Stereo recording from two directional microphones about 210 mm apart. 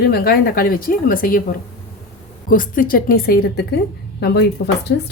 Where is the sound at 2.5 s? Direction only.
40° left (ahead or behind).